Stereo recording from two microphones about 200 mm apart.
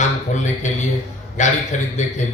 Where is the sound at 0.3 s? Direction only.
35° left (ahead or behind).